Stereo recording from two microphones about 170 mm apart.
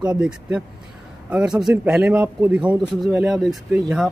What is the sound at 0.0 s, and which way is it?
Speech, 5° right (ahead or behind).